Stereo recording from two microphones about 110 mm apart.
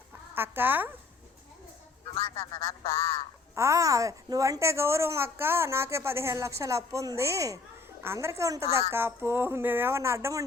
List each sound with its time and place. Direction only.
0.3 s a woman's voice: 20° right (ahead or behind)
2.1 s a man's voice: 35° left (ahead or behind)
3.5 s a woman's voice: 25° right (ahead or behind)